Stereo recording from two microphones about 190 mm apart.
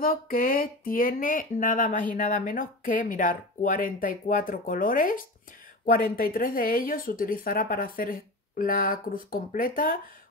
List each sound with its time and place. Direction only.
0.0 s speech: 50° left (ahead or behind)